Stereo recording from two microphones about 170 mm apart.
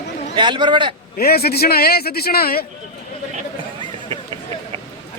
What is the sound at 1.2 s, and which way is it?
A man's voice, 65° left (ahead or behind).